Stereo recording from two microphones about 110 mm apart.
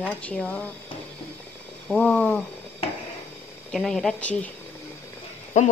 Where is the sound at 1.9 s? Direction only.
15° left (ahead or behind).